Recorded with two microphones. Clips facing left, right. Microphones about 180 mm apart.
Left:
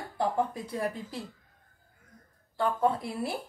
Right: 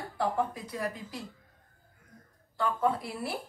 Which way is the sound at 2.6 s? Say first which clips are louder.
Left 2 dB; 25° left (ahead or behind).